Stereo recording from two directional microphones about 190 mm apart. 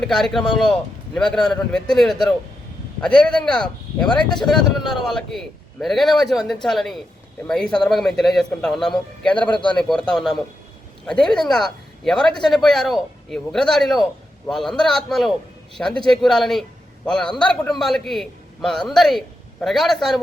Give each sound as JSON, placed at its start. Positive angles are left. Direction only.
{"t": 0.0, "sound": "speech", "side_deg": 0}
{"t": 9.5, "sound": "a man's voice", "side_deg": 25}
{"t": 9.7, "sound": "speech", "side_deg": 5}